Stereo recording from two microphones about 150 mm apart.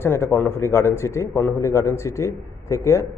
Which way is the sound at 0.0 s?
15° left (ahead or behind).